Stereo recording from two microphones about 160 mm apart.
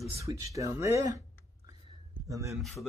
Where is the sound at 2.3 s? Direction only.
20° right (ahead or behind).